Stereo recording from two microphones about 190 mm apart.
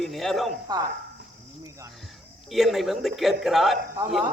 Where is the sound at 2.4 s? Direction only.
Centre (ahead or behind).